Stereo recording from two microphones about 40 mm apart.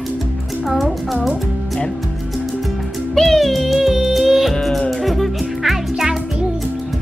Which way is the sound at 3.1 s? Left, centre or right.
Centre.